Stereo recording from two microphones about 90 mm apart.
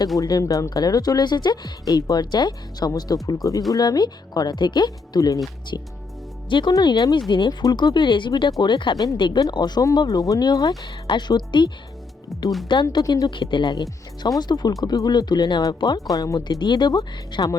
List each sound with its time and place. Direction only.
0.2 s speech: 45° left (ahead or behind)
6.5 s speech: 60° left (ahead or behind)
6.7 s speech: 50° left (ahead or behind)
12.3 s speech: centre (ahead or behind)
12.6 s speech: 60° left (ahead or behind)
13.0 s speech: 45° left (ahead or behind)
13.3 s speech: 60° left (ahead or behind); by 17.6 s 45° left (ahead or behind)